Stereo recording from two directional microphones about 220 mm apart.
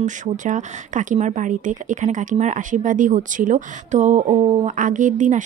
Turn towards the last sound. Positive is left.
turn(degrees=-35)  # may be behind; listen again after turning